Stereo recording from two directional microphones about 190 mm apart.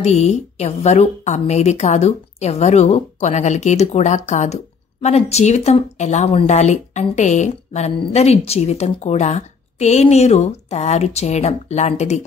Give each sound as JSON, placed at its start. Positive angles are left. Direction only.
{"t": 0.0, "sound": "speech", "side_deg": 35}